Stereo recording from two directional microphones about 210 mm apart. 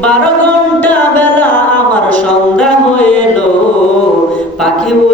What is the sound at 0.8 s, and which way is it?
Chant, 10° left (ahead or behind).